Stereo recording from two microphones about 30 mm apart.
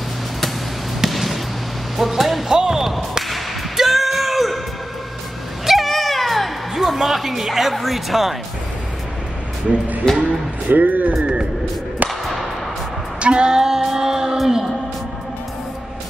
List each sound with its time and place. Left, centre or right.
1.1 s basketball bounce: centre
2.0 s music: centre
2.5 s basketball bounce: right
2.8 s a sound: centre
5.7 s music: centre
7.7 s speech: centre
10.1 s speech: left
10.7 s speech: right
12.0 s a sound: right
13.2 s female singing: right